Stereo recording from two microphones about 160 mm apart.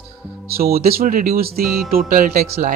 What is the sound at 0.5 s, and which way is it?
Speech, 70° right (ahead or behind).